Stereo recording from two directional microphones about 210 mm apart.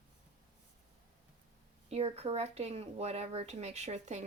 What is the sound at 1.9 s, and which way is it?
Speech, 30° right (ahead or behind).